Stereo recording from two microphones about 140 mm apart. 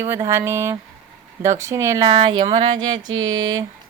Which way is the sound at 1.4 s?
20° right (ahead or behind).